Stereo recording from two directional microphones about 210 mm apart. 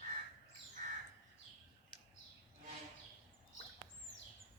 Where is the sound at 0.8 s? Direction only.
40° right (ahead or behind).